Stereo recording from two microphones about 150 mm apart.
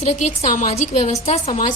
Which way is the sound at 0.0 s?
50° left (ahead or behind).